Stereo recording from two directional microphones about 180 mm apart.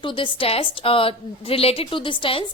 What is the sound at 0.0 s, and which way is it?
A woman's voice, 30° left (ahead or behind).